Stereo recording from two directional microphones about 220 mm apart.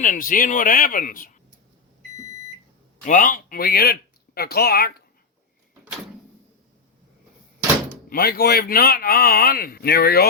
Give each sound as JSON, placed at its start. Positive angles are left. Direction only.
{"t": 0.0, "sound": "speech", "side_deg": 40}
{"t": 3.0, "sound": "speech", "side_deg": 35}
{"t": 8.1, "sound": "speech", "side_deg": 45}